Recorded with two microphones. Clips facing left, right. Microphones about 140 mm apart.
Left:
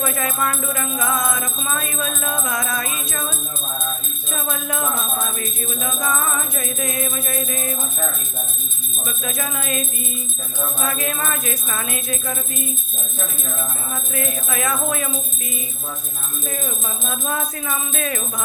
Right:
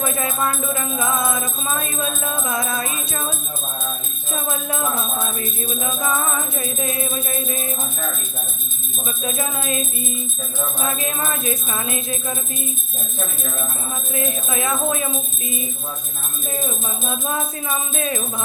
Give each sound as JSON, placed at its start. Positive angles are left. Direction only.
{"t": 0.0, "sound": "music", "side_deg": -25}
{"t": 4.3, "sound": "music", "side_deg": -25}
{"t": 9.2, "sound": "music", "side_deg": -25}
{"t": 14.1, "sound": "music", "side_deg": -25}
{"t": 17.1, "sound": "music", "side_deg": -20}